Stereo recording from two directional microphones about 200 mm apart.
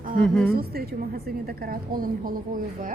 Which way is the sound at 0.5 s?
50° right (ahead or behind).